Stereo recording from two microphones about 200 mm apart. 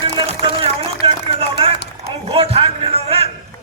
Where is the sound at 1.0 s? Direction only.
25° right (ahead or behind).